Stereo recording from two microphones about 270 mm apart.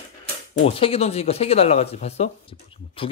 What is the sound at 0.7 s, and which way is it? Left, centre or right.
Speech, left.